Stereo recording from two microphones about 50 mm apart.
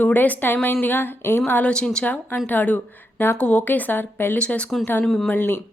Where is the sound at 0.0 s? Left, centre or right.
Left.